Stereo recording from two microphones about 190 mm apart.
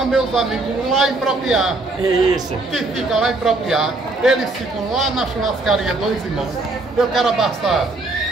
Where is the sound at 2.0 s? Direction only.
20° right (ahead or behind).